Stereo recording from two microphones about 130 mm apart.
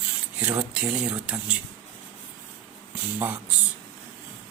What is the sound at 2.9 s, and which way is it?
Speech, 15° right (ahead or behind).